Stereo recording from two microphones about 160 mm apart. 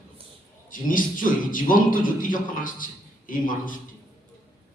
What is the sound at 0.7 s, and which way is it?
A man's voice, 60° left (ahead or behind).